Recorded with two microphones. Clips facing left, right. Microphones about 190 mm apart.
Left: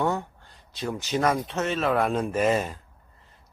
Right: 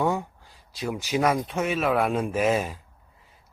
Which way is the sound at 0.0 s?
10° right (ahead or behind).